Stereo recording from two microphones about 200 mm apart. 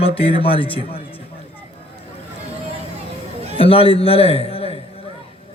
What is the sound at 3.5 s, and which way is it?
A man's voice, 30° left (ahead or behind).